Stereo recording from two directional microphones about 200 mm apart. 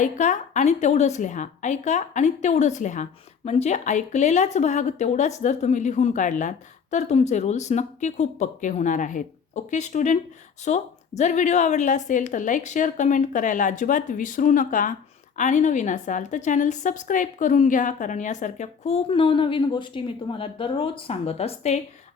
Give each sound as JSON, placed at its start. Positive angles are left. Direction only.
{"t": 0.0, "sound": "a woman's voice", "side_deg": 35}